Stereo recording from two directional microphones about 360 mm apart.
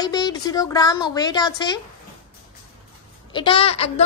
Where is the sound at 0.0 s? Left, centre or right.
Centre.